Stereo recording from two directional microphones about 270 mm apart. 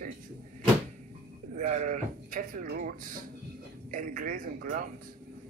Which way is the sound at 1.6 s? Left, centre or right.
Right.